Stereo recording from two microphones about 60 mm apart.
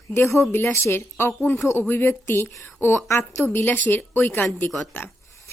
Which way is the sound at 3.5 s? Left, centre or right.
Left.